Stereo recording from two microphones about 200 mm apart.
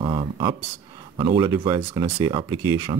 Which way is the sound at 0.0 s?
25° right (ahead or behind).